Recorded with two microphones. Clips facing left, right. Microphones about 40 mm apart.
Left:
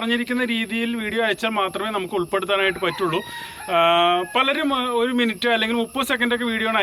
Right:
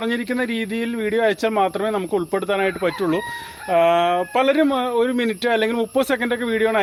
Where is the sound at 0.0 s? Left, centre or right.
Left.